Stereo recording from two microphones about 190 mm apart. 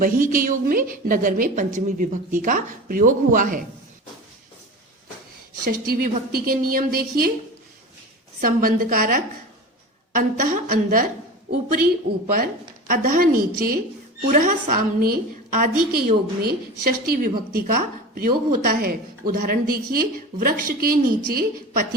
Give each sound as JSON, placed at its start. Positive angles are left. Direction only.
{"t": 0.0, "sound": "speech", "side_deg": -45}
{"t": 5.6, "sound": "speech", "side_deg": -50}
{"t": 8.4, "sound": "speech", "side_deg": -50}
{"t": 12.1, "sound": "a woman's voice", "side_deg": -35}
{"t": 12.9, "sound": "speech", "side_deg": -50}